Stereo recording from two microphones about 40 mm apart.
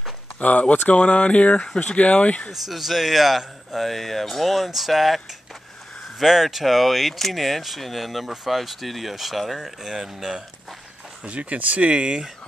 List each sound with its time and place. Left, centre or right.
0.4 s speech: left
2.5 s speech: centre
11.2 s speech: right